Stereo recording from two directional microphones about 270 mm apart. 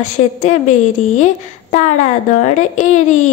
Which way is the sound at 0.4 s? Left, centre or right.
Left.